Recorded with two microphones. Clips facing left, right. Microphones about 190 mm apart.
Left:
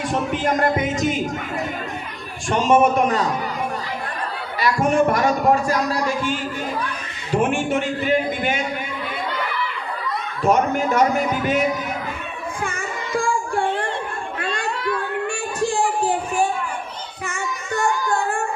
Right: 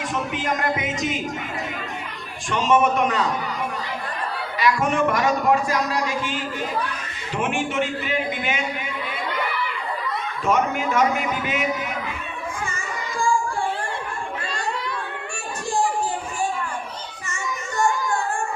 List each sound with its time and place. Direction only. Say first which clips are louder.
0.0 s speech: left 5 dB; 35° left (ahead or behind)
2.5 s a man's voice: left 3 dB; 45° left (ahead or behind)
4.6 s a man's voice: left 3 dB; 40° left (ahead or behind)
7.3 s a man's voice: left 4 dB; 45° left (ahead or behind)
10.4 s a man's voice: left 4 dB; 40° left (ahead or behind)
12.6 s music: left 3 dB; 60° left (ahead or behind)
16.0 s a sound: left 6 dB; 65° left (ahead or behind)